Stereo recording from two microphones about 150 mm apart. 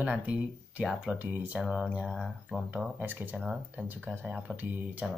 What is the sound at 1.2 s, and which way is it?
Speech, 10° right (ahead or behind).